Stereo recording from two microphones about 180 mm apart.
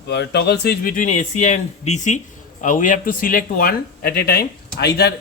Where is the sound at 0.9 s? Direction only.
45° left (ahead or behind).